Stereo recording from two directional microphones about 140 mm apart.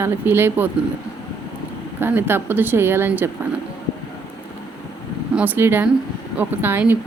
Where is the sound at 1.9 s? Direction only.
15° right (ahead or behind).